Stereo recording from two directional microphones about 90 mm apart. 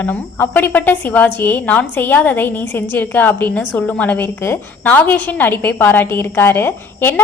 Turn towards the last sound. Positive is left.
turn(degrees=25)  # may be behind; listen again after turning